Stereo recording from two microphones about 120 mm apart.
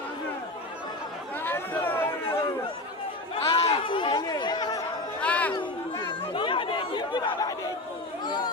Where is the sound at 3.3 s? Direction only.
55° left (ahead or behind); by 4.8 s 35° left (ahead or behind).